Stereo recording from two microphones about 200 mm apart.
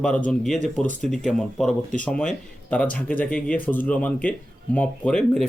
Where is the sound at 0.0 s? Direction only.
5° left (ahead or behind).